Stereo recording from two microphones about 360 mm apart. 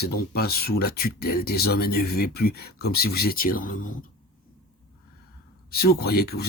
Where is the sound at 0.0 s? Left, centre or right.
Left.